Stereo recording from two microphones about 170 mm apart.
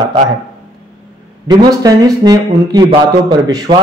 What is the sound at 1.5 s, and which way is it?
A man's voice, 20° right (ahead or behind).